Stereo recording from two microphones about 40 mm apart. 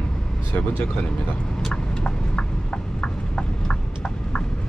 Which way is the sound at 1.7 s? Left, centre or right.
Left.